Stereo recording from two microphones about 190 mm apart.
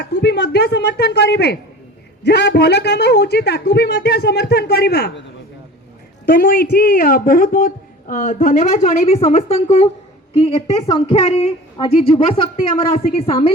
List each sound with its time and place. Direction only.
0.0 s a man's voice: 60° left (ahead or behind)
6.2 s a woman's voice: 50° left (ahead or behind); by 13.5 s 30° left (ahead or behind)